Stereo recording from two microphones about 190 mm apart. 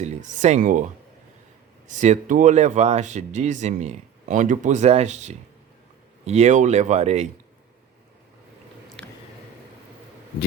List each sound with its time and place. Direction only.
0.0 s speech: 40° right (ahead or behind)
1.9 s speech: 40° right (ahead or behind)
9.0 s squish: 5° left (ahead or behind)